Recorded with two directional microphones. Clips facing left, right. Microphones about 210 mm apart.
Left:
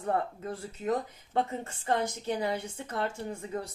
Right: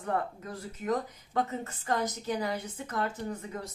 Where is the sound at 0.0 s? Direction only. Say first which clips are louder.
Left 2 dB; 30° left (ahead or behind).